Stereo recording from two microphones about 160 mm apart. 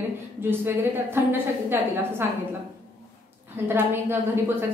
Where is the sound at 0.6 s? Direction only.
15° right (ahead or behind).